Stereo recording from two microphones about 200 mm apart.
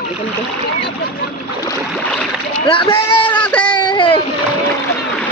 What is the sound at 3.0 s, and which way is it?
Speech, 10° left (ahead or behind).